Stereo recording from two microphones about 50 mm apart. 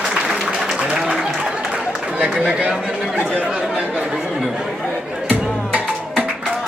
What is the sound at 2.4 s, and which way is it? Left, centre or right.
Chatter, right.